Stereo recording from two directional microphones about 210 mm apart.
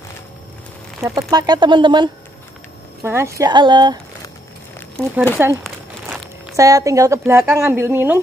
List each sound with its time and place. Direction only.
1.0 s speech: 15° right (ahead or behind)
3.0 s speech: 10° right (ahead or behind)
5.0 s speech: 5° left (ahead or behind)
5.6 s a sound: 5° right (ahead or behind)
6.5 s a woman's voice: 15° right (ahead or behind)